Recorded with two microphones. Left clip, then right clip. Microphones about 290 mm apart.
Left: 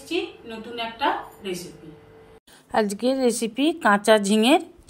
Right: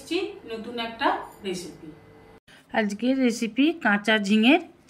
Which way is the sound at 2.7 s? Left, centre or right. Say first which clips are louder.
Left 3 dB; centre.